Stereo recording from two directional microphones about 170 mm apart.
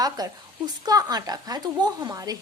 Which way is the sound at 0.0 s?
25° right (ahead or behind).